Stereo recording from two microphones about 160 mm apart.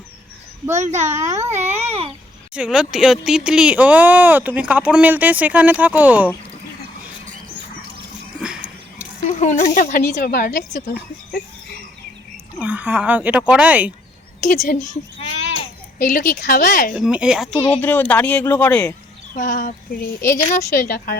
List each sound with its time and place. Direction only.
0.8 s a child's voice: 45° right (ahead or behind)
2.5 s speech: 5° right (ahead or behind)
8.4 s a sound: 5° right (ahead or behind)
9.4 s a woman's voice: 45° left (ahead or behind)
10.2 s a woman's voice: 70° left (ahead or behind)
12.5 s speech: 10° right (ahead or behind)
14.4 s a woman's voice: 50° left (ahead or behind)
16.0 s speech: 55° left (ahead or behind)
16.3 s speech: 70° left (ahead or behind)
16.9 s speech: 5° right (ahead or behind)
17.7 s speech: 10° left (ahead or behind)
19.3 s a sound: 55° left (ahead or behind)
20.2 s a woman's voice: 20° left (ahead or behind)
20.7 s speech: 60° left (ahead or behind)